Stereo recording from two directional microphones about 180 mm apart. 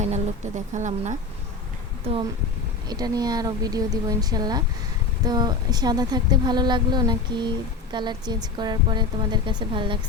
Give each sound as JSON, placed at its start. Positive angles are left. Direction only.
{"t": 0.0, "sound": "a woman's voice", "side_deg": -40}
{"t": 2.8, "sound": "a woman's voice", "side_deg": -20}